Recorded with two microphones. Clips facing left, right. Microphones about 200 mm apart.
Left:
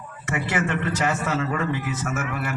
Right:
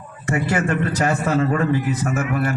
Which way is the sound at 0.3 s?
40° right (ahead or behind).